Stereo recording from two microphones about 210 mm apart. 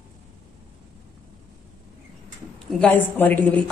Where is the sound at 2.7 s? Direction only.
5° left (ahead or behind).